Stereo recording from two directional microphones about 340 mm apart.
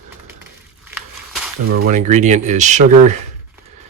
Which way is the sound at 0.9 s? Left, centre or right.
Centre.